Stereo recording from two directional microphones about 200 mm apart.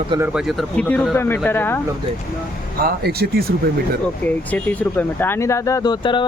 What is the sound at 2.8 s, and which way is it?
Speech, 50° right (ahead or behind).